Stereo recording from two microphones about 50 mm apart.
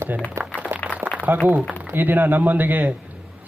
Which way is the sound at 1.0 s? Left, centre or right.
Right.